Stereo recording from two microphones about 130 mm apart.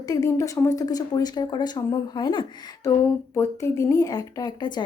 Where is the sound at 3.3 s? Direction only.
25° left (ahead or behind).